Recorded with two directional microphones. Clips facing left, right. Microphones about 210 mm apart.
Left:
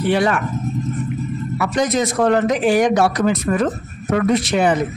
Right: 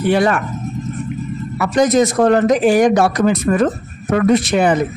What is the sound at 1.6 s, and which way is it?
Speech, 45° right (ahead or behind).